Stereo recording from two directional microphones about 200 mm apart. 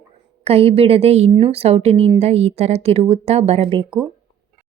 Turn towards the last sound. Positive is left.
turn(degrees=-30)  # may be behind; listen again after turning